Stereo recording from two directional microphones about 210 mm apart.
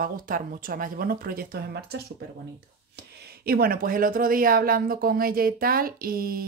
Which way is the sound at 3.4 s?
45° right (ahead or behind).